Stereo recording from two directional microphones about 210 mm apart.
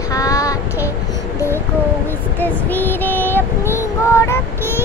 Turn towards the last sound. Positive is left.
turn(degrees=10)  # may be behind; listen again after turning